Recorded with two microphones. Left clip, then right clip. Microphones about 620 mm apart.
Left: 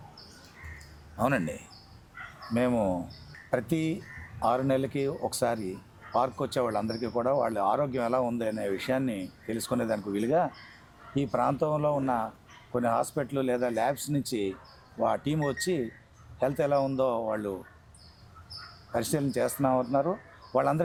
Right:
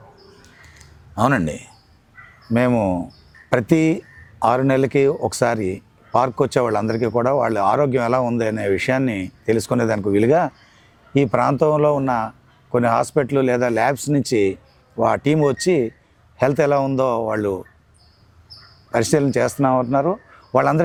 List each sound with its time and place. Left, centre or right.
1.1 s speech: right
18.9 s speech: right